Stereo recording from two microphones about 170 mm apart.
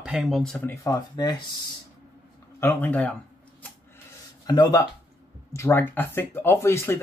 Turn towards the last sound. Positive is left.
turn(degrees=15)  # may be behind; listen again after turning